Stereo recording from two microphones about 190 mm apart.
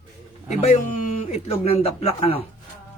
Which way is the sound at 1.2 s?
30° left (ahead or behind).